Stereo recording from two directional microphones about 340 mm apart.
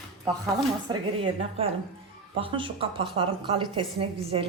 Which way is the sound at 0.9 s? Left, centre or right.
Centre.